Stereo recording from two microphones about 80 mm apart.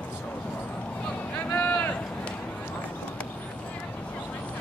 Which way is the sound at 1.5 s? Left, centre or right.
Centre.